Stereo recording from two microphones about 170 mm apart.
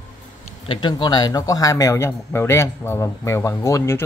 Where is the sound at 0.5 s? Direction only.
30° left (ahead or behind).